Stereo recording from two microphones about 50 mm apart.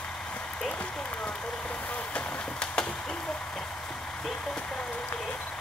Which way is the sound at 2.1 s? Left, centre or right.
Left.